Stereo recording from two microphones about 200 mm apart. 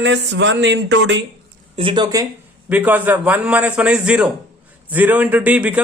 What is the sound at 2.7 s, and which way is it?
Speech, 10° right (ahead or behind).